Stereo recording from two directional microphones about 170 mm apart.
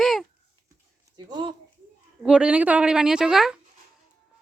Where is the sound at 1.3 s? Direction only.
25° right (ahead or behind).